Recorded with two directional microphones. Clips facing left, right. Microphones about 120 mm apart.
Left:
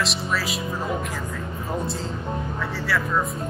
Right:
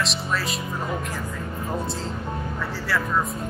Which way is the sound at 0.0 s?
Centre (ahead or behind).